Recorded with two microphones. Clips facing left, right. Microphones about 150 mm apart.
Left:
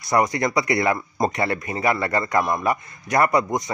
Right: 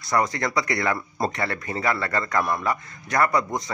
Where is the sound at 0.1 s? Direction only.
20° left (ahead or behind).